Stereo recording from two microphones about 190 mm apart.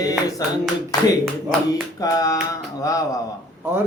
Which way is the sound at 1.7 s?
20° left (ahead or behind).